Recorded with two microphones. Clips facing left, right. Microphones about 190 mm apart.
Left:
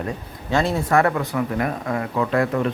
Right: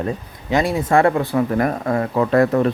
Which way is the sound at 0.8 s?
30° right (ahead or behind).